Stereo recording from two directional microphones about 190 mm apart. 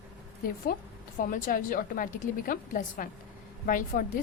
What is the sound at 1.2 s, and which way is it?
A woman's voice, 45° left (ahead or behind).